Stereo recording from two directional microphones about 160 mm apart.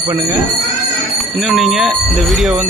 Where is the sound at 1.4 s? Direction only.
Centre (ahead or behind).